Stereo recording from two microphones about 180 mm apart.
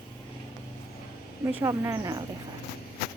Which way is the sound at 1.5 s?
15° right (ahead or behind).